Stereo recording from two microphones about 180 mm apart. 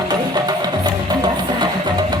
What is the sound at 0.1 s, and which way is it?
Music, 25° right (ahead or behind).